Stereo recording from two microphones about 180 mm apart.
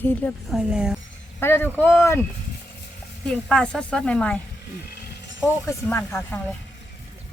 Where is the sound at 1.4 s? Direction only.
10° left (ahead or behind).